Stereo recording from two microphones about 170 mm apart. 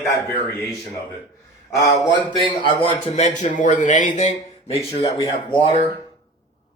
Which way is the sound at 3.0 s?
45° left (ahead or behind).